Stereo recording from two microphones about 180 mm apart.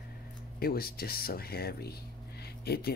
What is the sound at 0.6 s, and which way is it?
Speech, 55° left (ahead or behind).